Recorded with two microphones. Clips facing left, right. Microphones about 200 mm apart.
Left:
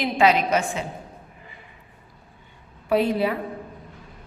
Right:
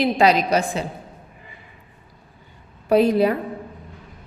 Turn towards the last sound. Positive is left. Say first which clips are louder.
# right 5 dB
turn(degrees=-40)  # may be behind; listen again after turning